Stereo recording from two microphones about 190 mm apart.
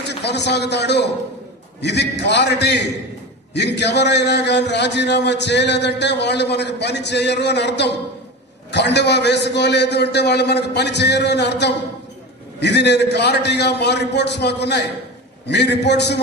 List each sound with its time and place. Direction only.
0.0 s a man's voice: 65° left (ahead or behind)